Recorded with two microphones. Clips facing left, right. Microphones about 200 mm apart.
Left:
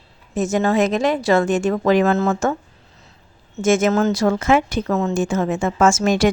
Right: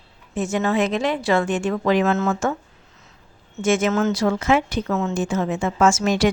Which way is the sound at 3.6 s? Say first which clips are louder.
Left 3 dB; 45° left (ahead or behind).